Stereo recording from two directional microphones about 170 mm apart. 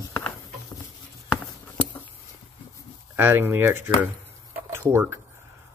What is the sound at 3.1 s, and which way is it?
Speech, 10° right (ahead or behind).